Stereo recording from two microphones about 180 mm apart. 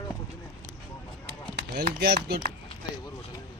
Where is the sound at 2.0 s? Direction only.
65° right (ahead or behind).